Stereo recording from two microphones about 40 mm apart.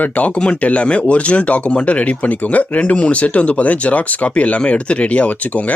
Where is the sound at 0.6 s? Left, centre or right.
Left.